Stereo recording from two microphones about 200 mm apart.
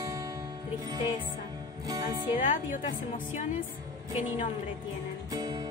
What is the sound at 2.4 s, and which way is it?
Speech, 40° left (ahead or behind).